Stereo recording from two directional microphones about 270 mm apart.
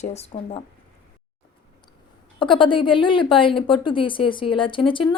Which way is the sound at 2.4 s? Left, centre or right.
Centre.